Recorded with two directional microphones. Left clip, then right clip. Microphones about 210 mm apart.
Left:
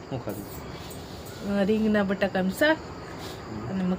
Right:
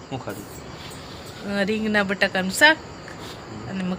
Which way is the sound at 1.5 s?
15° left (ahead or behind).